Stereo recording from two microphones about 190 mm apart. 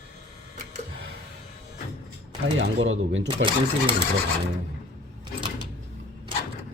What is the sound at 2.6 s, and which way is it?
Speech, 80° right.